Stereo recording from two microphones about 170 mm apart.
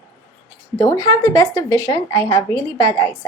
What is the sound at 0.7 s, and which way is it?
A woman's voice, 20° left (ahead or behind).